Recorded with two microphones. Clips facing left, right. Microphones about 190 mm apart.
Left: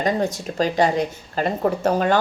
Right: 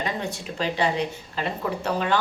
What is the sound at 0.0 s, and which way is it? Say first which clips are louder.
Speech: left 8 dB; 40° left (ahead or behind).